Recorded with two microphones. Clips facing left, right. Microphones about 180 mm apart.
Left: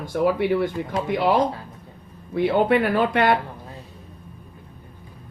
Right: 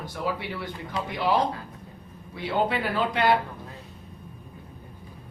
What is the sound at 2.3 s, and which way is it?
Speech, 55° left (ahead or behind).